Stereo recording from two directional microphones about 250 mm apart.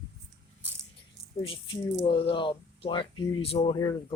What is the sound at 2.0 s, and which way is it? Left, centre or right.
Speech, left.